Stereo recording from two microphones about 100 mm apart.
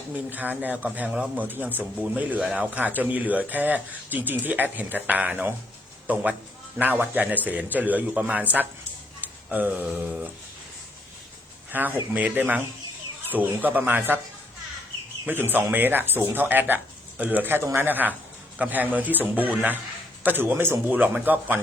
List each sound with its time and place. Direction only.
0.3 s speech: 15° right (ahead or behind)
9.5 s speech: 15° right (ahead or behind)
11.7 s speech: 20° right (ahead or behind)
15.3 s speech: 20° right (ahead or behind)